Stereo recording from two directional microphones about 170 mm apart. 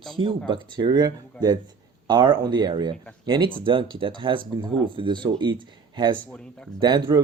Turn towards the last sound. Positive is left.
turn(degrees=-25)  # may be behind; listen again after turning